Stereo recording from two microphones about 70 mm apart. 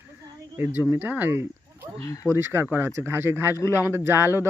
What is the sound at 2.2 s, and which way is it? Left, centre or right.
Speech, centre.